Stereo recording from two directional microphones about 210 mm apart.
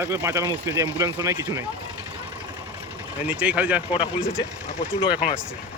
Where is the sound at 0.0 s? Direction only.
15° right (ahead or behind).